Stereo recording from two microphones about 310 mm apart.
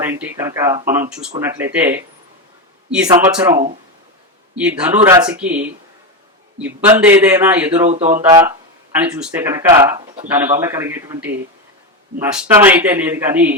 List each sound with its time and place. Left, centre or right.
0.0 s a man's voice: centre
6.8 s a man's voice: centre
7.9 s a sound: right
8.1 s a man's voice: centre